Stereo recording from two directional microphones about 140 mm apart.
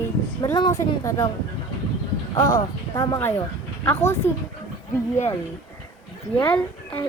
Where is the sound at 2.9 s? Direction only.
20° left (ahead or behind).